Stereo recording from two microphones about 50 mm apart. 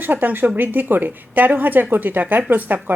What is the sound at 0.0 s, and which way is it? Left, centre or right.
A woman's voice, right.